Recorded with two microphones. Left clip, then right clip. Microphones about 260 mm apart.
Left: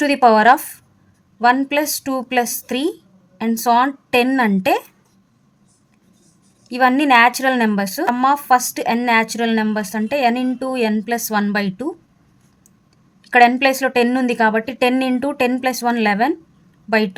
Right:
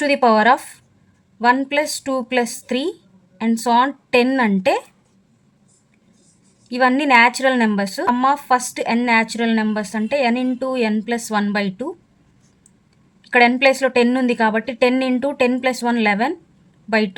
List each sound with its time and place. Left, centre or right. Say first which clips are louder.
0.0 s a woman's voice: left 2 dB; centre
6.7 s a woman's voice: left 1 dB; centre
13.2 s a woman's voice: left 1 dB; centre